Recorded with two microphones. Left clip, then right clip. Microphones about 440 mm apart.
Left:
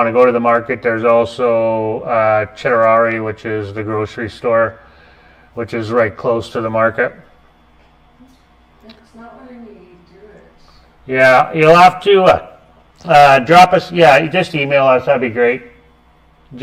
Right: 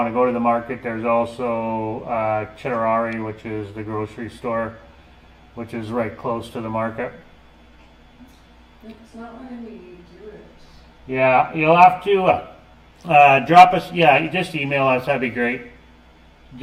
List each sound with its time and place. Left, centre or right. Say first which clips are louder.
0.0 s speech: left 8 dB; left
11.1 s a man's voice: left 7 dB; left